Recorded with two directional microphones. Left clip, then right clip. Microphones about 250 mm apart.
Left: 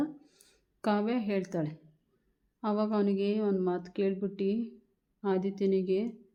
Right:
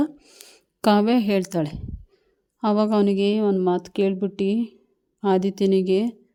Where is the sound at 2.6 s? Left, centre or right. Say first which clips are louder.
Right 10 dB; right.